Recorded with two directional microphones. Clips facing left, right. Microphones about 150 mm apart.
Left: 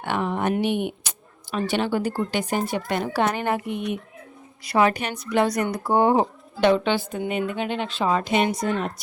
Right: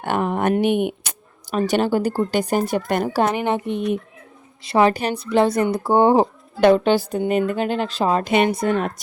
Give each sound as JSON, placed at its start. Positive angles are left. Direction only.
{"t": 0.0, "sound": "speech", "side_deg": -50}
{"t": 1.5, "sound": "a woman's voice", "side_deg": -40}
{"t": 3.3, "sound": "a woman's voice", "side_deg": -20}
{"t": 6.6, "sound": "a woman's voice", "side_deg": -45}
{"t": 8.3, "sound": "speech", "side_deg": -60}